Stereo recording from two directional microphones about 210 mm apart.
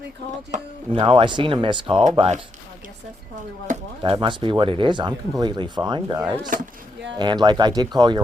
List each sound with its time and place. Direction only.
0.5 s speech: 25° right (ahead or behind)
3.7 s speech: 25° right (ahead or behind)
6.5 s speech: 40° right (ahead or behind)
7.2 s speech: 20° right (ahead or behind)